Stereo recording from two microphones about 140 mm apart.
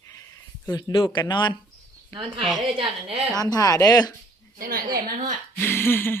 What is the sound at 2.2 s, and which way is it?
Speech, 35° right (ahead or behind).